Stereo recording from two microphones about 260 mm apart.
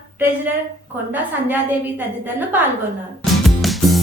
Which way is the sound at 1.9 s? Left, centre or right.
Centre.